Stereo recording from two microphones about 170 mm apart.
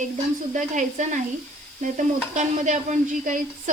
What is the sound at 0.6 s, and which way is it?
Sizzle, 45° right (ahead or behind).